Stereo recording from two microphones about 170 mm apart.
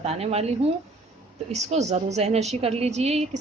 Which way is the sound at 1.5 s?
40° right (ahead or behind).